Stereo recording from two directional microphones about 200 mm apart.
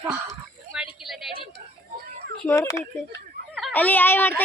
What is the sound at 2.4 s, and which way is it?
Speech, 15° left (ahead or behind).